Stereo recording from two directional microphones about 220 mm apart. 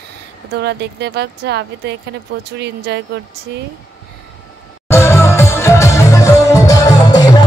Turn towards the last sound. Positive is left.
turn(degrees=15)  # may be behind; listen again after turning